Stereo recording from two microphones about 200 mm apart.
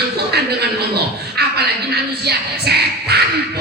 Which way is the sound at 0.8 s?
55° right (ahead or behind).